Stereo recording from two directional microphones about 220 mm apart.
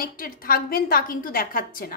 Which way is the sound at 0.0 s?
40° left (ahead or behind).